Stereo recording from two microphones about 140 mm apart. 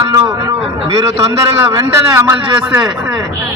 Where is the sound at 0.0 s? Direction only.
25° right (ahead or behind).